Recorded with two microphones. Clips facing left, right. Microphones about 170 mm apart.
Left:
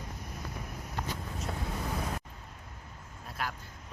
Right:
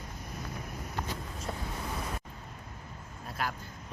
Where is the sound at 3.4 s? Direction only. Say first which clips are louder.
Right 2 dB; centre (ahead or behind).